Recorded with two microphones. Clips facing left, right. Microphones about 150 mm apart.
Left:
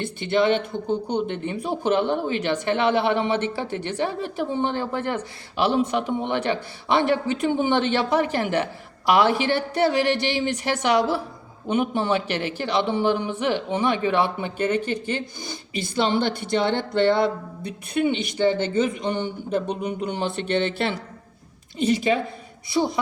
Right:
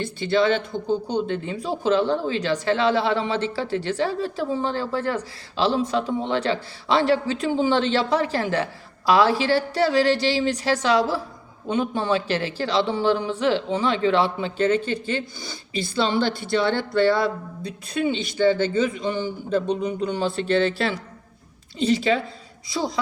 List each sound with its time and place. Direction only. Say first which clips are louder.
0.0 s speech: even; 20° left (ahead or behind)